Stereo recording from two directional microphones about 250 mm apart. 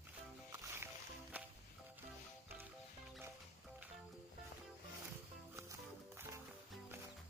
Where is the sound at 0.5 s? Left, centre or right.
Centre.